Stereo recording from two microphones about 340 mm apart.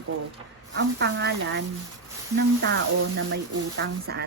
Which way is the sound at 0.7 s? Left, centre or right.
Right.